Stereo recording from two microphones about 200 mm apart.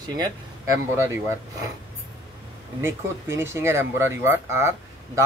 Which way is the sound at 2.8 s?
10° right (ahead or behind).